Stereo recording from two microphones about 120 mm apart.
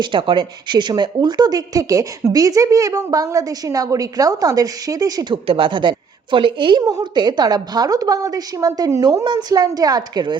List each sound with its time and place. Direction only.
0.0 s speech: 45° right (ahead or behind)
5.5 s a woman's voice: 45° right (ahead or behind)